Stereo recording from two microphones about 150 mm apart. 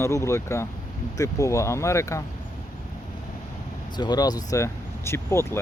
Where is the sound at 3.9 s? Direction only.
30° left (ahead or behind).